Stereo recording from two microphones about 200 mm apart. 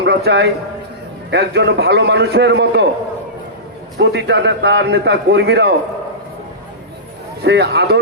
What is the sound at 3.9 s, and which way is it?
A man's voice, 60° right (ahead or behind).